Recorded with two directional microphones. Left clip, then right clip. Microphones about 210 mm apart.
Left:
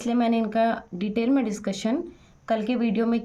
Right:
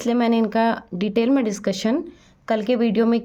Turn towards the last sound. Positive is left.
turn(degrees=-40)  # may be behind; listen again after turning